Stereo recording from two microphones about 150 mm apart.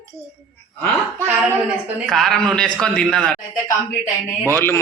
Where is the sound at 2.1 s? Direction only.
Centre (ahead or behind).